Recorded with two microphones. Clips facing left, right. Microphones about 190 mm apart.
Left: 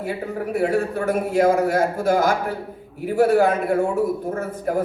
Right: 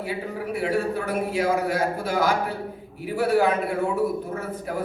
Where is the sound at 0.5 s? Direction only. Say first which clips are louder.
Left 3 dB; 50° left (ahead or behind).